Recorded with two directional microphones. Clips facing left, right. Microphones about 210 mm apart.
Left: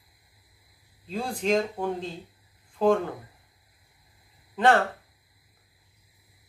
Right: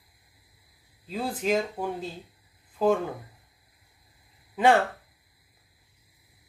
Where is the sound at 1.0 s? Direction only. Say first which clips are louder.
Even; 5° right (ahead or behind).